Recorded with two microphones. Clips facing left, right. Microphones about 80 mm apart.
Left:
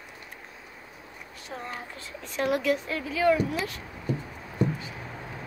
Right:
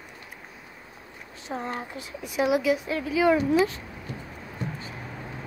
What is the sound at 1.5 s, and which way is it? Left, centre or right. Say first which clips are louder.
A woman's voice: right 5 dB; right.